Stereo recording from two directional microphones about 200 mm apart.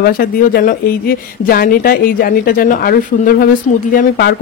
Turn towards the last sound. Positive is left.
turn(degrees=50)  # may be behind; listen again after turning